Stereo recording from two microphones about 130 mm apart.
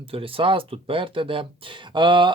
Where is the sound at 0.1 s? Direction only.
45° right (ahead or behind).